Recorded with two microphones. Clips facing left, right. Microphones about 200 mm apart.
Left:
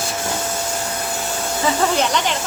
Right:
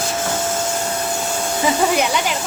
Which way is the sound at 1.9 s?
10° right (ahead or behind).